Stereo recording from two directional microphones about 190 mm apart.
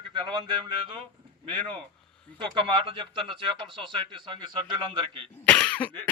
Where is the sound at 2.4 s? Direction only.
25° right (ahead or behind).